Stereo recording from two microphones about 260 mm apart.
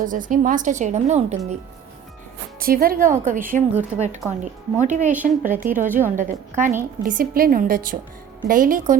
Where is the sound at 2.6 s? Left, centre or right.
Right.